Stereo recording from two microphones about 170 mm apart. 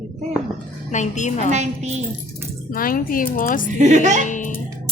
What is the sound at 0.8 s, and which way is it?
Speech, 45° left (ahead or behind).